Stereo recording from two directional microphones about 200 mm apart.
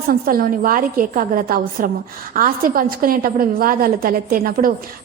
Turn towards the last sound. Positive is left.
turn(degrees=-45)  # may be behind; listen again after turning